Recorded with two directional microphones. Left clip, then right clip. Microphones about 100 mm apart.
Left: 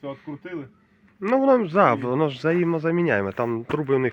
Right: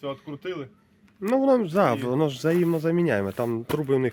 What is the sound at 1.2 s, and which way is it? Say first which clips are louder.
Speech: left 2 dB; 25° right (ahead or behind).